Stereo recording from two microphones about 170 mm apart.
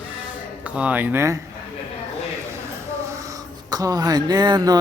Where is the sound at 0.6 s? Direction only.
10° right (ahead or behind).